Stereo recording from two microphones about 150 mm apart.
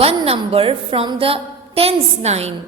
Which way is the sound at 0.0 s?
40° right (ahead or behind).